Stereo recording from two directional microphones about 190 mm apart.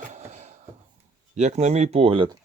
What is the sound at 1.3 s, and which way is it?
Speech, 35° right (ahead or behind).